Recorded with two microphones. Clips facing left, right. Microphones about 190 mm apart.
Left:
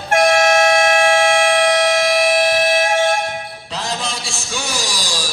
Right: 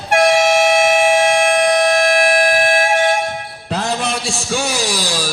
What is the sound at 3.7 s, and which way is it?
Music, 60° right (ahead or behind).